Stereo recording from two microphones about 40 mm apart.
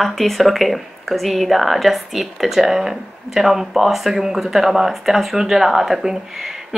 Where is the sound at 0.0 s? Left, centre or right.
Centre.